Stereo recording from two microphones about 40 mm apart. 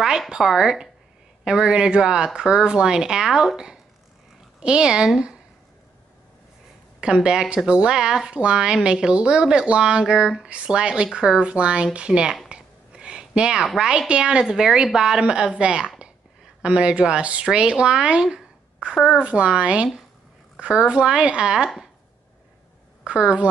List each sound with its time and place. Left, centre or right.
0.4 s speech: centre
7.0 s speech: right
12.4 s a sound: right
13.7 s speech: centre
14.0 s speech: right
14.4 s a woman's voice: centre
23.0 s speech: right